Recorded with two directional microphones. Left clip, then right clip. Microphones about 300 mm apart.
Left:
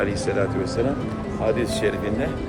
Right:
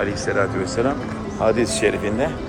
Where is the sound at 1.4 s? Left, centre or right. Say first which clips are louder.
Right 4 dB; right.